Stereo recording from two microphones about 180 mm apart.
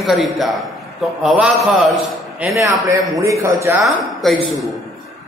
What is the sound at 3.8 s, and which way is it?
Speech, centre (ahead or behind).